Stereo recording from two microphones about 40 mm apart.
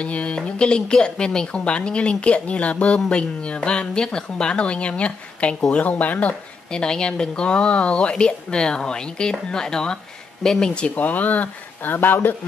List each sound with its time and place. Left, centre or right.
0.0 s speech: left
6.7 s speech: left
11.0 s speech: left